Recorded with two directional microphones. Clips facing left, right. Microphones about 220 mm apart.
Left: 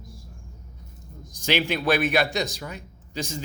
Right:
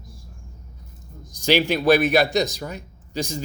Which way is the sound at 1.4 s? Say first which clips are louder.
Right 6 dB; 40° right (ahead or behind).